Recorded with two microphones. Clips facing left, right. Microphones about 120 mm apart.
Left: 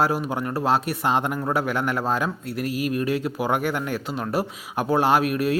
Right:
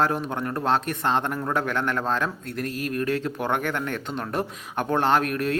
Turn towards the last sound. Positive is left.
turn(degrees=10)  # may be behind; listen again after turning